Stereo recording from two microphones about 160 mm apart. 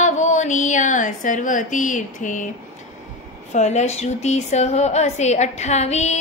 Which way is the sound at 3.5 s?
45° left (ahead or behind).